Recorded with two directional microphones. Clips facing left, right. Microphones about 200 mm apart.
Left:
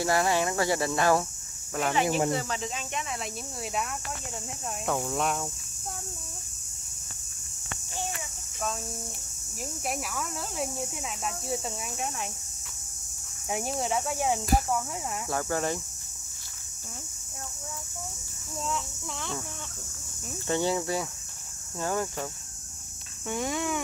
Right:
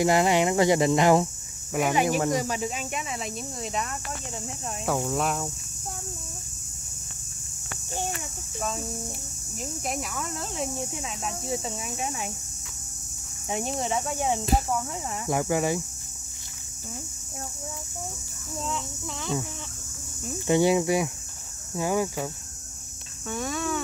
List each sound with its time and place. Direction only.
0.0 s speech: 20° right (ahead or behind); by 5.5 s centre (ahead or behind)
8.5 s speech: centre (ahead or behind)
13.5 s speech: 5° left (ahead or behind)
15.2 s speech: 15° right (ahead or behind)
18.6 s speech: centre (ahead or behind)
20.4 s speech: 15° right (ahead or behind)
23.2 s speech: 20° left (ahead or behind)